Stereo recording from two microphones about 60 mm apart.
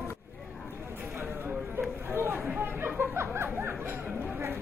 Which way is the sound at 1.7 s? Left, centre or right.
Right.